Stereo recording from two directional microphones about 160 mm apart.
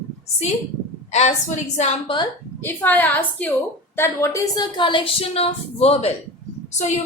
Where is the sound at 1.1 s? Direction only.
45° left (ahead or behind).